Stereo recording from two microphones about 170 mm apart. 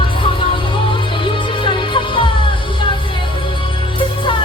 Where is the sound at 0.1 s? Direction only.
30° left (ahead or behind).